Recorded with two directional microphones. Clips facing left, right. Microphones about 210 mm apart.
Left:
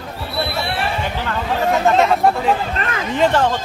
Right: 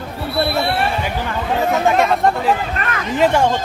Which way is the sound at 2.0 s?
Centre (ahead or behind).